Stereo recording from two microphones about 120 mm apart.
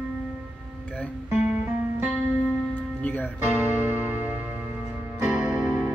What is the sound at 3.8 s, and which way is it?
Music, 15° right (ahead or behind).